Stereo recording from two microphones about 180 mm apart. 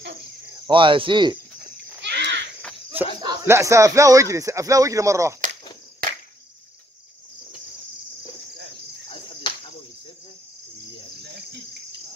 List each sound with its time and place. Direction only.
0.6 s speech: 25° right (ahead or behind)
2.0 s insect: 75° right (ahead or behind)
3.2 s speech: 15° right (ahead or behind)
9.5 s cricket: 25° left (ahead or behind)